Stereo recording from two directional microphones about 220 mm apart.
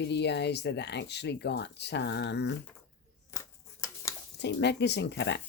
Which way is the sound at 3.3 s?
15° left (ahead or behind).